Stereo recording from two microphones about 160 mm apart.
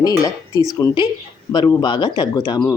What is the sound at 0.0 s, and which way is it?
Speech, 20° left (ahead or behind).